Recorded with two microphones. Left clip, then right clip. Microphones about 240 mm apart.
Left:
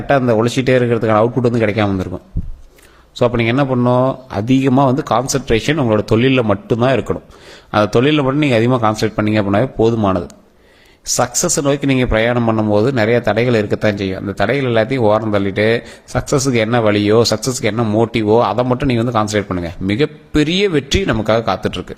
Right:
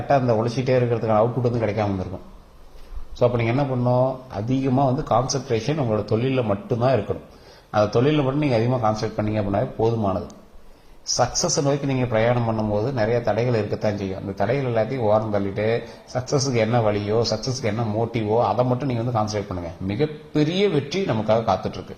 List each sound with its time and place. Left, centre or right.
0.1 s speech: left
3.2 s a man's voice: left
11.2 s a man's voice: left